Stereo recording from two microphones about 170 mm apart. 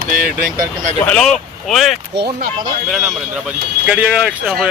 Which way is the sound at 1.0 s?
5° left (ahead or behind).